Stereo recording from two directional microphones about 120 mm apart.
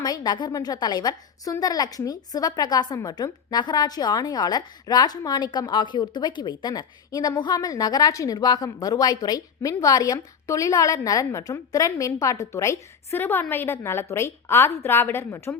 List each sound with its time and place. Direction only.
0.0 s a woman's voice: 35° left (ahead or behind)